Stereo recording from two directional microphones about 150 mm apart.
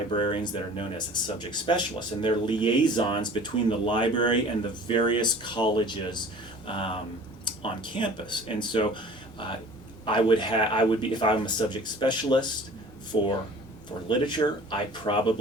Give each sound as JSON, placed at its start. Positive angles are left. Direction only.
{"t": 0.1, "sound": "speech", "side_deg": 35}